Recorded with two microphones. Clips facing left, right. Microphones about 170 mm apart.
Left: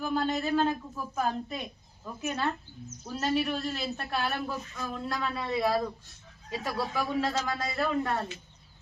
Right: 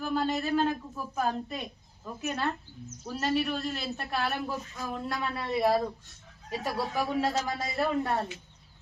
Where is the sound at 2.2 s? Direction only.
Centre (ahead or behind).